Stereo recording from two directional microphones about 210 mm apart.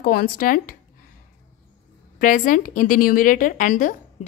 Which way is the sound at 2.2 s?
40° left (ahead or behind).